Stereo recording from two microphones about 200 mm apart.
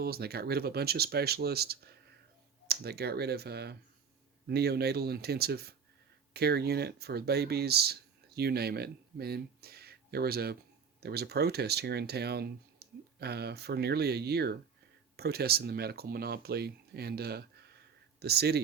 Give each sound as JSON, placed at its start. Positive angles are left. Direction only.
{"t": 0.0, "sound": "speech", "side_deg": -50}